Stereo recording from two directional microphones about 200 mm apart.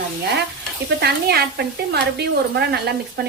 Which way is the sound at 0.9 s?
55° right (ahead or behind).